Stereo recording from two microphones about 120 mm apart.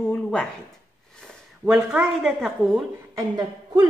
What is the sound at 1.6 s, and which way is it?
A woman's voice, 5° right (ahead or behind).